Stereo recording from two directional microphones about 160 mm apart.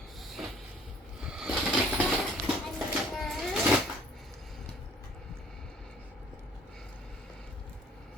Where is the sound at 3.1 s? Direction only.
Centre (ahead or behind).